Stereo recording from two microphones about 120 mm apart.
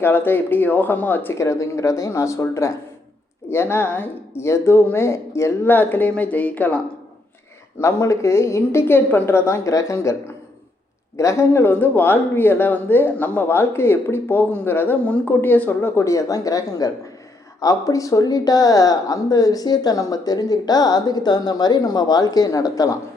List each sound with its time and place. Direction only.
0.0 s speech: 15° left (ahead or behind)
11.2 s speech: 25° left (ahead or behind)